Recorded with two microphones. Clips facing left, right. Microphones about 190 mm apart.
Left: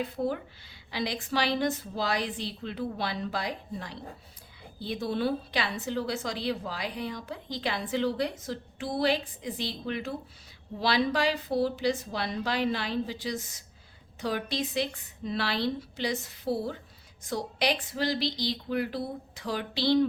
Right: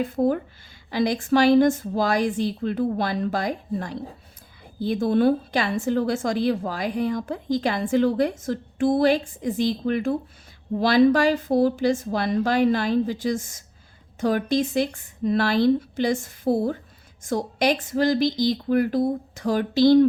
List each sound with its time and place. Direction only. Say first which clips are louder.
0.0 s a woman's voice: right 8 dB; 50° right (ahead or behind)